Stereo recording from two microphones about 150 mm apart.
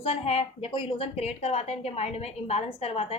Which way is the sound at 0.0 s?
45° left (ahead or behind).